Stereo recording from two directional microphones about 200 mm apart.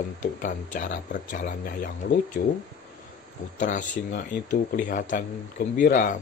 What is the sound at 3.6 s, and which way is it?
Speech, 40° left (ahead or behind).